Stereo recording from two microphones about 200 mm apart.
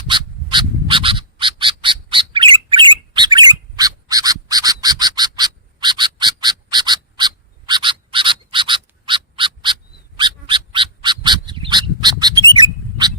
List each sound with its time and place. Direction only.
0.1 s bird: 25° right (ahead or behind)